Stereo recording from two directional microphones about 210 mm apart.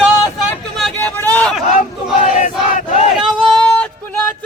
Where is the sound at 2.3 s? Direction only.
35° left (ahead or behind).